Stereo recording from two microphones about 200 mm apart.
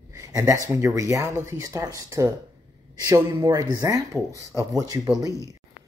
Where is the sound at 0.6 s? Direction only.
15° right (ahead or behind).